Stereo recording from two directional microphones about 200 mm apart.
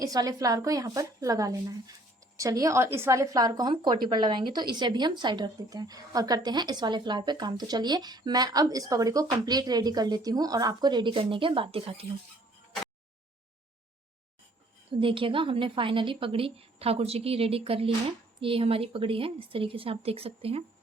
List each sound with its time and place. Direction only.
0.0 s a woman's voice: 20° right (ahead or behind)
14.8 s a woman's voice: 25° right (ahead or behind)